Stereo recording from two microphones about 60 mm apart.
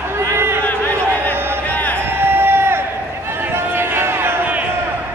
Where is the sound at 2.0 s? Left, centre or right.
Right.